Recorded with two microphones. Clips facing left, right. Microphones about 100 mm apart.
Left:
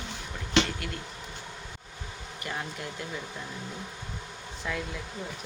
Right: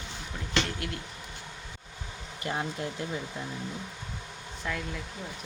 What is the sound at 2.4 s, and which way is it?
Speech, 25° right (ahead or behind).